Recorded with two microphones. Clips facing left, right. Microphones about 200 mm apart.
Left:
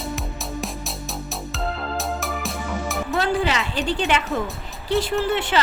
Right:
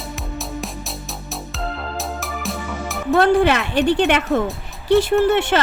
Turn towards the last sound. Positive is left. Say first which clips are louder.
# right 6 dB
turn(degrees=-65)  # may be behind; listen again after turning